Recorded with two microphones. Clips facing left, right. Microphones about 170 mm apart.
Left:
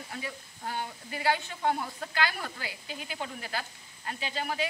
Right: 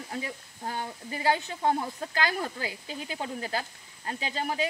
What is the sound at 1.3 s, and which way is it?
Speech, 35° right (ahead or behind).